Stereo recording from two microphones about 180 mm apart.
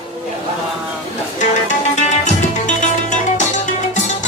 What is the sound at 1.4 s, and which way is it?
Music, 40° left (ahead or behind).